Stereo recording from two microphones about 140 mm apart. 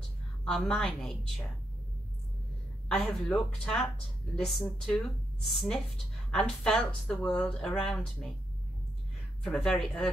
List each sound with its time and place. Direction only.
0.5 s speech: 5° left (ahead or behind)
2.9 s speech: 5° left (ahead or behind)
9.4 s speech: 5° left (ahead or behind)